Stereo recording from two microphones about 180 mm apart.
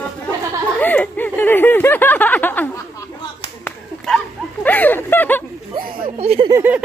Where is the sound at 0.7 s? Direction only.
10° left (ahead or behind).